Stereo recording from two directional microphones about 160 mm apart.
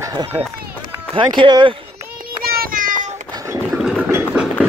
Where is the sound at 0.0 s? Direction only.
20° right (ahead or behind).